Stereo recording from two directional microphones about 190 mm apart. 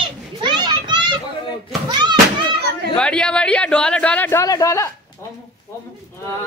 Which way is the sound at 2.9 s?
5° left (ahead or behind).